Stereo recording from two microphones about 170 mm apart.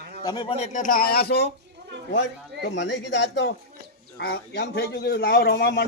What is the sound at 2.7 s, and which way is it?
Speech, 90° left.